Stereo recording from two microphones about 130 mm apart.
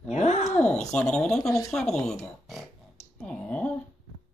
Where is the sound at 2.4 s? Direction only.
Centre (ahead or behind).